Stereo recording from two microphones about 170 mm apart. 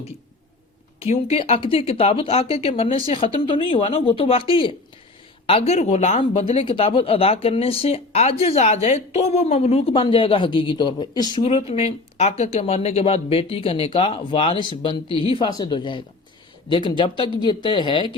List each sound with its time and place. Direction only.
1.0 s speech: 35° left (ahead or behind)